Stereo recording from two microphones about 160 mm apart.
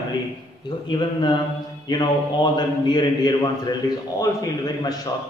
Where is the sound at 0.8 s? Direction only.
30° left (ahead or behind).